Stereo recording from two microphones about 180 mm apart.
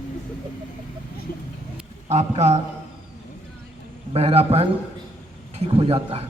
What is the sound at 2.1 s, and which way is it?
Speech, 40° right (ahead or behind).